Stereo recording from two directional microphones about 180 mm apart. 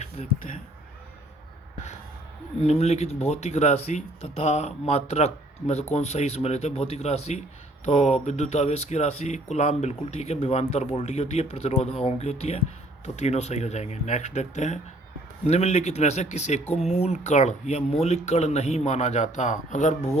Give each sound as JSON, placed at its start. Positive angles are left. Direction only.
{"t": 0.0, "sound": "a man's voice", "side_deg": 40}
{"t": 2.6, "sound": "speech", "side_deg": 35}